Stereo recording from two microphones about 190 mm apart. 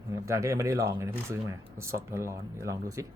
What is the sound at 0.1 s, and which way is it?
Speech, 15° right (ahead or behind).